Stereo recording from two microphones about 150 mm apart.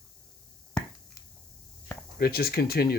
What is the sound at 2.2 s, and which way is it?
Speech, 90° left.